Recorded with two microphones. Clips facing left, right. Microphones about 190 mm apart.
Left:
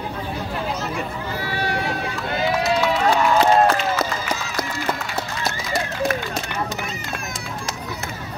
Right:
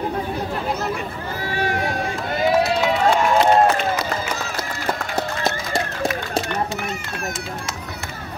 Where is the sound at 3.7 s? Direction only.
55° right (ahead or behind).